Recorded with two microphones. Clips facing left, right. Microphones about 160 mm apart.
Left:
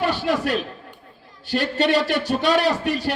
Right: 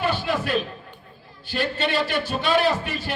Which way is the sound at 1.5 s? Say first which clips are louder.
Left 5 dB; 75° left (ahead or behind).